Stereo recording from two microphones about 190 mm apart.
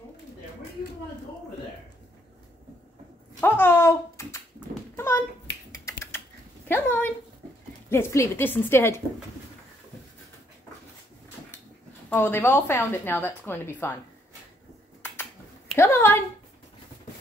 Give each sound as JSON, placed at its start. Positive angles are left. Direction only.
{"t": 3.3, "sound": "speech", "side_deg": 10}
{"t": 4.9, "sound": "a sound", "side_deg": 15}
{"t": 5.5, "sound": "finger snapping", "side_deg": 60}
{"t": 6.7, "sound": "a woman's voice", "side_deg": 10}
{"t": 12.1, "sound": "a woman's voice", "side_deg": 10}
{"t": 15.0, "sound": "a sound", "side_deg": 10}
{"t": 15.7, "sound": "a woman's voice", "side_deg": 15}